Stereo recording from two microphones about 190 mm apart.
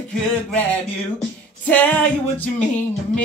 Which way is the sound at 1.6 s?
10° left (ahead or behind).